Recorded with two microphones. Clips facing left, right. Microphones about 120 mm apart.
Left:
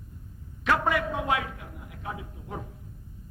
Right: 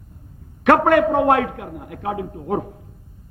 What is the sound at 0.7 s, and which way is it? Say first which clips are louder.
A man's voice: right 11 dB; 60° right (ahead or behind).